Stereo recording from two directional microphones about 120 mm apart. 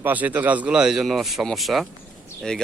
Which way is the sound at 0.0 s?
15° right (ahead or behind).